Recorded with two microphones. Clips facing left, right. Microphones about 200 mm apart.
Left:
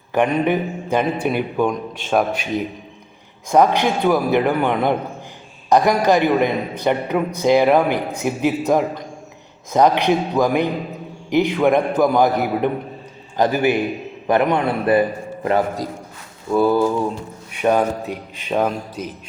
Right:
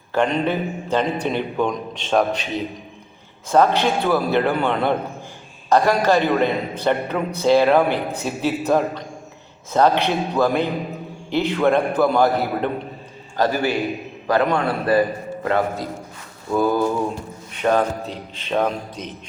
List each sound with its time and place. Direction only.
0.1 s a man's voice: 15° left (ahead or behind)
16.5 s mantra: 5° left (ahead or behind)
17.5 s a man's voice: 10° left (ahead or behind)